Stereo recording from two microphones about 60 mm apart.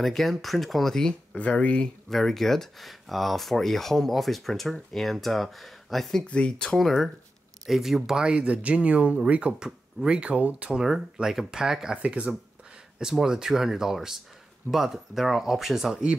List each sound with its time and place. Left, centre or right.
0.0 s speech: centre
2.0 s speech: centre
6.2 s speech: centre
6.6 s speech: centre
10.8 s speech: centre
12.0 s speech: right
13.2 s speech: centre